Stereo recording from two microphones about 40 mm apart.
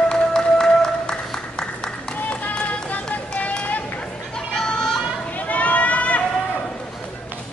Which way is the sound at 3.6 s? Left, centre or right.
Left.